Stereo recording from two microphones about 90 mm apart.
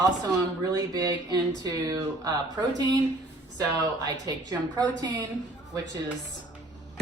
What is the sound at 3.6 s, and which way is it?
A woman's voice, 50° right (ahead or behind).